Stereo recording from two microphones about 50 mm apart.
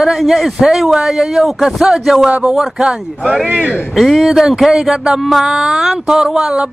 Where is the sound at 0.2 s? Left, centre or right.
Centre.